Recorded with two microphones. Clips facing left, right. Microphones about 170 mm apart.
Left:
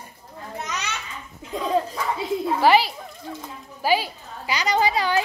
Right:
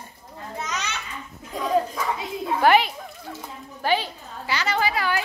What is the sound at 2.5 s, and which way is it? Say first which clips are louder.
A child's voice: right 1 dB; centre (ahead or behind).